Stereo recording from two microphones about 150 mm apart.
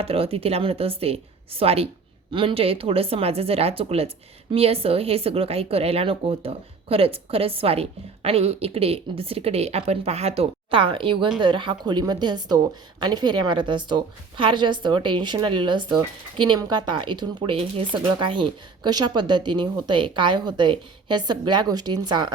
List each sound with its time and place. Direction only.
0.0 s a woman's voice: 40° right (ahead or behind)